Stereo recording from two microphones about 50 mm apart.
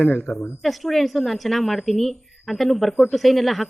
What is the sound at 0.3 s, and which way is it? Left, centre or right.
Speech, centre.